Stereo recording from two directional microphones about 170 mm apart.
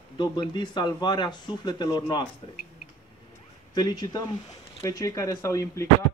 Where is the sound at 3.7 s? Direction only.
25° left (ahead or behind).